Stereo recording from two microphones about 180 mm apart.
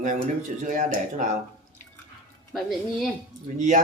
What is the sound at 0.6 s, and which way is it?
Speech, 45° right (ahead or behind).